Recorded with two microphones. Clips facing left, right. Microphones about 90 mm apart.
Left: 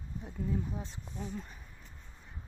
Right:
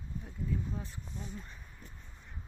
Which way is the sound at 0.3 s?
15° left (ahead or behind).